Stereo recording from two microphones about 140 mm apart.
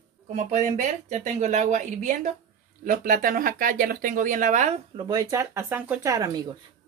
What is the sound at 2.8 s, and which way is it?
Speech, 75° right (ahead or behind).